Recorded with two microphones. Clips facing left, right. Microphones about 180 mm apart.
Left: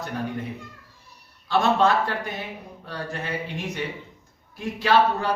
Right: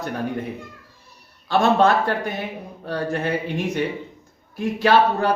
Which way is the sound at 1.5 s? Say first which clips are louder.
Right 3 dB; 50° right (ahead or behind).